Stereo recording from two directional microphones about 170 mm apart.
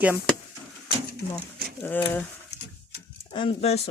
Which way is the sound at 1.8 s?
10° left (ahead or behind).